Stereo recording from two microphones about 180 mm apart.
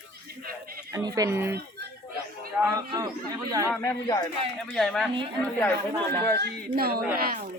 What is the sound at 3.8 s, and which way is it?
Speech, 15° left (ahead or behind).